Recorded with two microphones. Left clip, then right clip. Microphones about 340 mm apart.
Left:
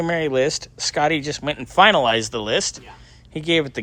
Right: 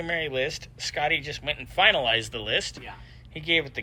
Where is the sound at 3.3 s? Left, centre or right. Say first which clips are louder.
Left 5 dB; left.